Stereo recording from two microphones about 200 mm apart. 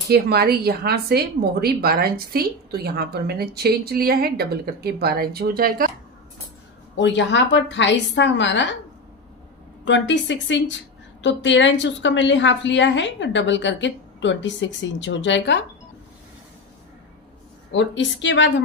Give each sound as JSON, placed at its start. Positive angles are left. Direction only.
{"t": 0.1, "sound": "a woman's voice", "side_deg": -55}
{"t": 7.0, "sound": "a woman's voice", "side_deg": 60}
{"t": 9.8, "sound": "a woman's voice", "side_deg": 65}
{"t": 17.7, "sound": "a woman's voice", "side_deg": 65}